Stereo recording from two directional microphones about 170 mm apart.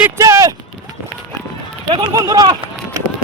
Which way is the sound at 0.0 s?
15° right (ahead or behind).